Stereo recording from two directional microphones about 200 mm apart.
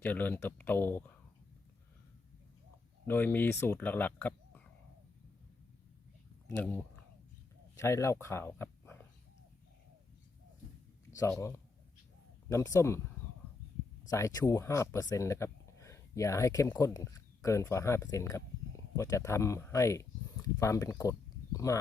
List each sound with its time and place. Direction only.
0.0 s speech: 10° left (ahead or behind)
3.1 s speech: 10° left (ahead or behind)
6.5 s speech: 10° left (ahead or behind)
11.1 s speech: 15° left (ahead or behind)
14.1 s speech: 15° left (ahead or behind)